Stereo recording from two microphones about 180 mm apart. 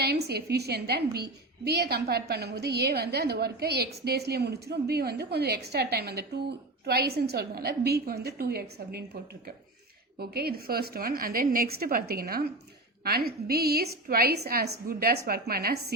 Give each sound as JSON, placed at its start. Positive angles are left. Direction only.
{"t": 0.0, "sound": "a sound", "side_deg": -65}
{"t": 0.5, "sound": "a woman's voice", "side_deg": -65}
{"t": 10.2, "sound": "a woman's voice", "side_deg": -60}